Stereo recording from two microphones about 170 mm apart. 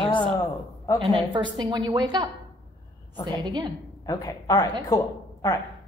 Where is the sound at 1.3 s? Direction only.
30° right (ahead or behind).